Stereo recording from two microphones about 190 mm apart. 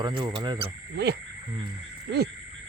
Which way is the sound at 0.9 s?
60° right (ahead or behind).